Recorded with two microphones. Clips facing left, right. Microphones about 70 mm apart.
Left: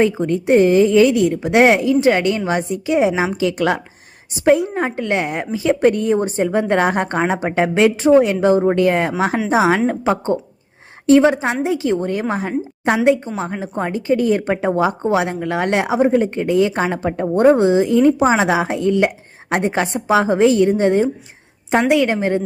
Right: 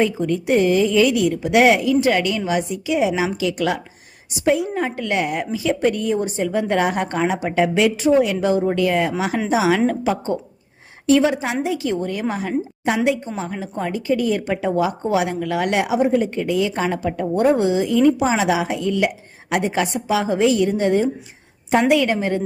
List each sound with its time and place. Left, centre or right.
0.0 s a woman's voice: left